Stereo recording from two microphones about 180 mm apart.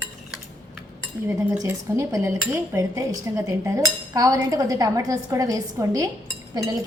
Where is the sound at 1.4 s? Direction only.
15° right (ahead or behind).